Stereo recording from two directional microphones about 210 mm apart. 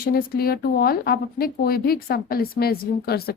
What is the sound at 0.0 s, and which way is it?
A woman's voice, 45° left (ahead or behind).